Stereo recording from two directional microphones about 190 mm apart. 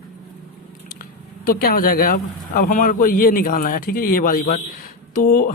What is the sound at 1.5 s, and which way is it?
Speech, 50° left (ahead or behind).